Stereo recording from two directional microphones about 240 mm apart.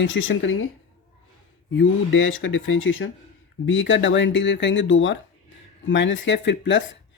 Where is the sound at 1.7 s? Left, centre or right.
Left.